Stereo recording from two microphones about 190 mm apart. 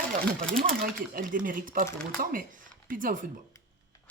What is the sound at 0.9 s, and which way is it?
Speech, 45° right (ahead or behind).